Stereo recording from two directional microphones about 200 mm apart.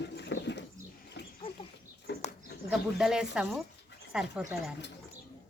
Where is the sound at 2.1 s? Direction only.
60° left (ahead or behind).